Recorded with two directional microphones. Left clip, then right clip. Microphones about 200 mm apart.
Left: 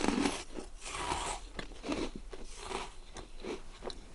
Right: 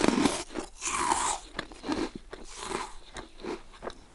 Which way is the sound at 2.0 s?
50° right (ahead or behind).